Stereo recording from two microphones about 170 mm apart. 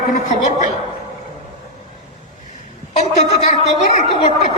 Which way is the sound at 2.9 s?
45° left (ahead or behind).